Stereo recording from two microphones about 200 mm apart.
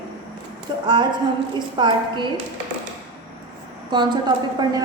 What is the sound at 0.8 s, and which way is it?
A woman's voice, 20° right (ahead or behind).